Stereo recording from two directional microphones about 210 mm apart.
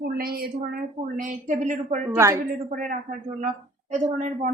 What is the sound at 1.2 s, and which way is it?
Speech, 35° right (ahead or behind).